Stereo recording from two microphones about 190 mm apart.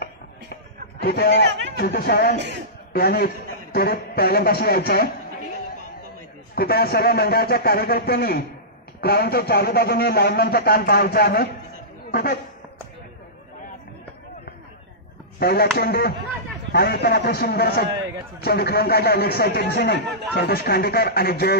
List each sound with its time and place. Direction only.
1.0 s a man's voice: 55° left (ahead or behind)
2.3 s a man's voice: 65° right (ahead or behind)
2.9 s a man's voice: 55° left (ahead or behind)
6.5 s a man's voice: 55° left (ahead or behind)
15.3 s a man's voice: 55° left (ahead or behind)